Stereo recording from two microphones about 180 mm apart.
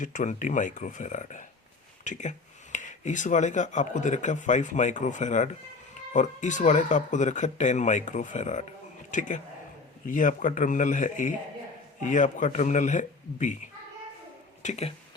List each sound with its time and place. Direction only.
0.0 s a man's voice: 45° left (ahead or behind)
14.6 s speech: 40° left (ahead or behind)